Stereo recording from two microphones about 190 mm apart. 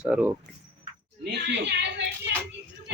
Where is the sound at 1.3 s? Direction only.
65° right (ahead or behind).